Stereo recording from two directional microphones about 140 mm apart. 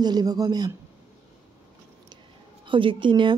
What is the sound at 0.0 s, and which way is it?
Speech, 30° right (ahead or behind).